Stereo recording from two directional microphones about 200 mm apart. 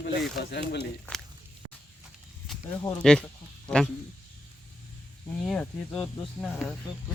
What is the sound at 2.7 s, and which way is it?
Speech, 15° left (ahead or behind).